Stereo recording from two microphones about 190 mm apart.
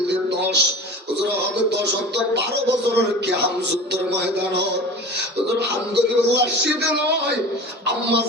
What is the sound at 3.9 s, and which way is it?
Speech, 65° right (ahead or behind).